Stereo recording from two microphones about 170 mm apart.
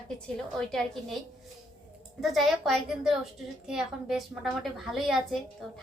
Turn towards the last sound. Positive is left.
turn(degrees=0)  # may be behind; listen again after turning